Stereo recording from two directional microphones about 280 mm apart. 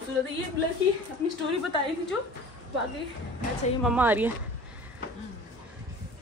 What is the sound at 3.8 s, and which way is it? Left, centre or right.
Speech, centre.